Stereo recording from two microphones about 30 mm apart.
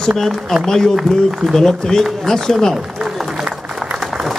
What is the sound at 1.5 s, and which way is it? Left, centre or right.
Speech, centre.